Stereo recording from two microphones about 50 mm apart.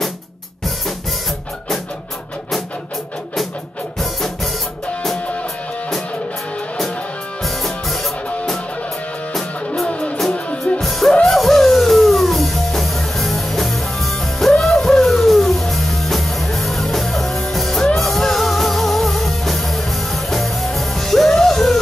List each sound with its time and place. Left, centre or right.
7.4 s music: centre
9.8 s music: left
10.8 s music: centre